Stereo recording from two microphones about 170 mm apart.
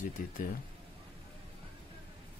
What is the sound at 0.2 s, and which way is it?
Speech, 50° left (ahead or behind).